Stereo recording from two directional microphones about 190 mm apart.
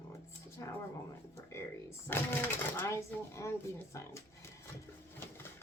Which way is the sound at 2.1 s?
10° left (ahead or behind).